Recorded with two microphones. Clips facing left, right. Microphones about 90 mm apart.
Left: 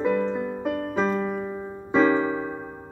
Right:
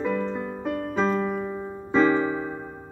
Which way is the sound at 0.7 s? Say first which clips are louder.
Right 2 dB; 10° left (ahead or behind).